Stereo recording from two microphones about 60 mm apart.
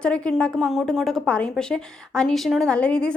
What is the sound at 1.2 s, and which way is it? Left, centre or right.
A woman's voice, centre.